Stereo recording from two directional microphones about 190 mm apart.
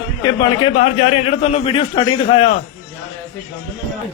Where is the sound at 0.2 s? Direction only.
25° left (ahead or behind).